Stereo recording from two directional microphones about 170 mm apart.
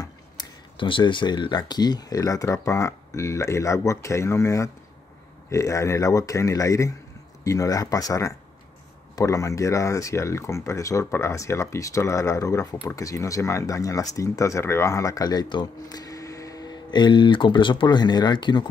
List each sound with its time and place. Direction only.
0.0 s speech: 25° left (ahead or behind)